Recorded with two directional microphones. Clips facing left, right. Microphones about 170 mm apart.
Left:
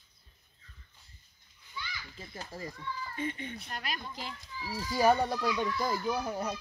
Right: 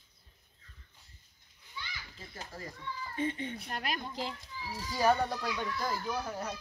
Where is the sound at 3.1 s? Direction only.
25° right (ahead or behind).